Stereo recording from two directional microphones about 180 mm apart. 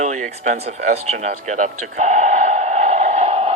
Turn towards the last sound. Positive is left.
turn(degrees=-35)  # may be behind; listen again after turning